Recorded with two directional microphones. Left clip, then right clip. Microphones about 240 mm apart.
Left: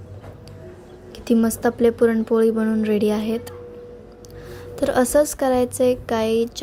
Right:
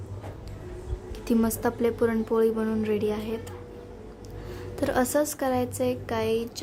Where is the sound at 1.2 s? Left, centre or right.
Centre.